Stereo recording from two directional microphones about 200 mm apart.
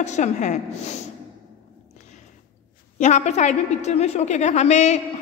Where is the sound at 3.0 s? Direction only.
35° left (ahead or behind).